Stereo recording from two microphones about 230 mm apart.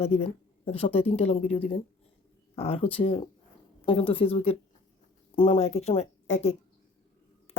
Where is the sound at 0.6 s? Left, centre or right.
Left.